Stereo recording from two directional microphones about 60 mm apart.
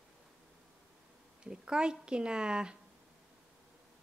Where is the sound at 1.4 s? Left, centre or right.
Centre.